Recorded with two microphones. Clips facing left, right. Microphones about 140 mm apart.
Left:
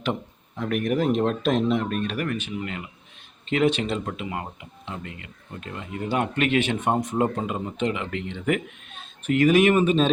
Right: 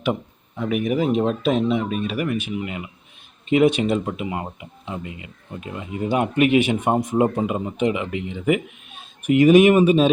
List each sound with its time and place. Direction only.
0.0 s speech: 5° right (ahead or behind)